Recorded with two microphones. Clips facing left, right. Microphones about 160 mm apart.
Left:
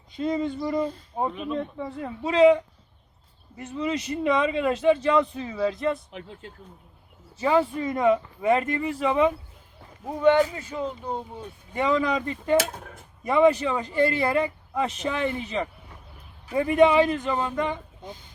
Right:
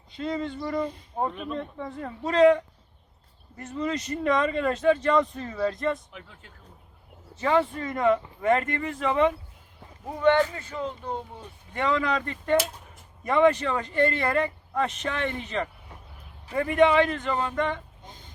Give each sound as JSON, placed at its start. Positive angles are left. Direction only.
{"t": 0.2, "sound": "speech", "side_deg": 15}
{"t": 3.8, "sound": "speech", "side_deg": 5}
{"t": 6.1, "sound": "speech", "side_deg": 30}
{"t": 7.3, "sound": "speech", "side_deg": 5}
{"t": 12.5, "sound": "speech", "side_deg": 60}
{"t": 13.2, "sound": "speech", "side_deg": 10}